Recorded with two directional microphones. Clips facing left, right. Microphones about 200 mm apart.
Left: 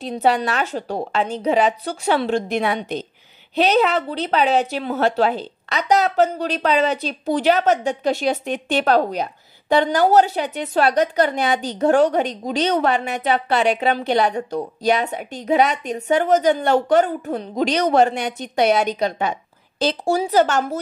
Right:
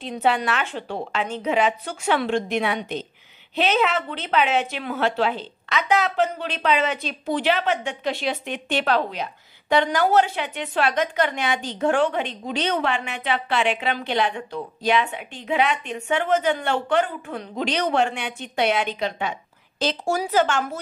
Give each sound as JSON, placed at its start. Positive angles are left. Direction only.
{"t": 0.0, "sound": "a woman's voice", "side_deg": 40}